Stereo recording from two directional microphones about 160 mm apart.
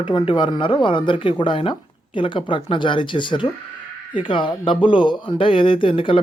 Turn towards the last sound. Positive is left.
turn(degrees=35)  # may be behind; listen again after turning